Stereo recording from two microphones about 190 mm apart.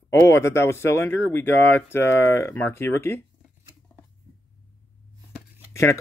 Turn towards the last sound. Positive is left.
turn(degrees=15)  # may be behind; listen again after turning